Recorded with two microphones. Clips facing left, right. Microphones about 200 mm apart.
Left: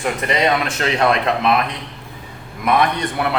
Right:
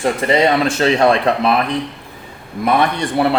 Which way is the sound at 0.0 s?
30° right (ahead or behind).